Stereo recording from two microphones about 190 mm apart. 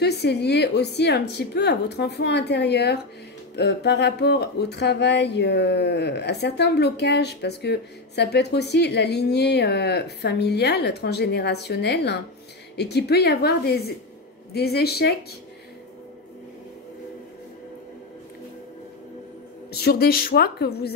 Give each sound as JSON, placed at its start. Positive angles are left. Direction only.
{"t": 0.0, "sound": "speech", "side_deg": 60}
{"t": 19.7, "sound": "speech", "side_deg": 55}